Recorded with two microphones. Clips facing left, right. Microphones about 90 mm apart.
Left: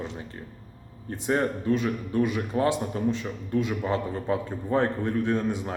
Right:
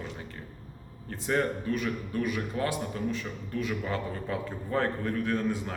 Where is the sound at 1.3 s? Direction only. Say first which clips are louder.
Left 4 dB; 25° left (ahead or behind).